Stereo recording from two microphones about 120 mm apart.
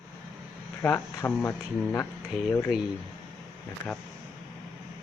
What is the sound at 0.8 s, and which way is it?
Speech, 20° left (ahead or behind).